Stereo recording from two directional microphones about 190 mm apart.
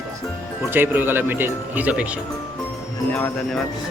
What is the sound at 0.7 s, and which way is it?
Speech, 10° right (ahead or behind).